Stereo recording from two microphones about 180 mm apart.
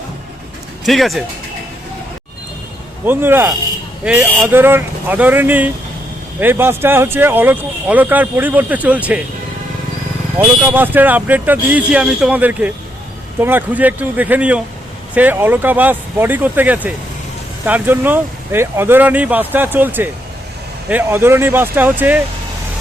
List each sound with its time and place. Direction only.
0.9 s speech: centre (ahead or behind)
3.1 s speech: 10° right (ahead or behind)
10.3 s speech: 10° right (ahead or behind)